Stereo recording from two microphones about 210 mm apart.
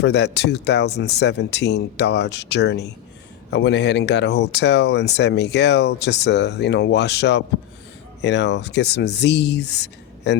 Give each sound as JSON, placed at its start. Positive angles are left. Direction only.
{"t": 0.0, "sound": "speech", "side_deg": 55}